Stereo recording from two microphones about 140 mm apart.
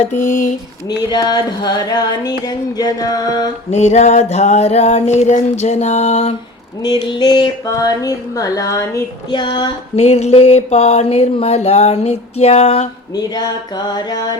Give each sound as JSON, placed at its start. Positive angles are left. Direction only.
{"t": 0.0, "sound": "a sound", "side_deg": 60}
{"t": 0.9, "sound": "speech", "side_deg": 30}
{"t": 3.7, "sound": "speech", "side_deg": 50}
{"t": 6.8, "sound": "speech", "side_deg": 30}
{"t": 9.3, "sound": "a sound", "side_deg": 35}
{"t": 9.9, "sound": "speech", "side_deg": 50}
{"t": 13.1, "sound": "speech", "side_deg": 30}